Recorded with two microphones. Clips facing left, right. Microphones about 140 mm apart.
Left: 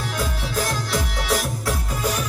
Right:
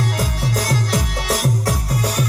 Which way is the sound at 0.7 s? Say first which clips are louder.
Right 4 dB; 40° right (ahead or behind).